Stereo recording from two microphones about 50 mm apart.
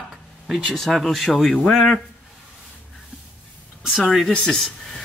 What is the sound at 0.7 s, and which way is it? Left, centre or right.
Speech, centre.